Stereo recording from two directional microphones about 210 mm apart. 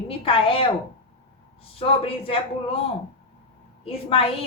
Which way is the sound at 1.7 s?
25° left (ahead or behind).